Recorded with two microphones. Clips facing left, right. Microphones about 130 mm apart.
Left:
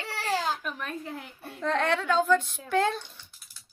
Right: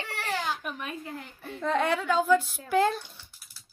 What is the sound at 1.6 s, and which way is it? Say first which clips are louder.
A woman's voice: even; 5° right (ahead or behind).